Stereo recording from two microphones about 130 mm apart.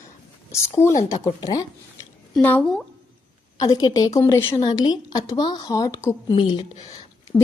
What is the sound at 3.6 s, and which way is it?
Speech, 30° left (ahead or behind).